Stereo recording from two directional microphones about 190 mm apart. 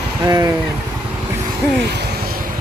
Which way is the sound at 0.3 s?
20° right (ahead or behind).